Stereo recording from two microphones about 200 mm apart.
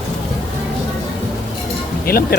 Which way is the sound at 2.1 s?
50° left (ahead or behind).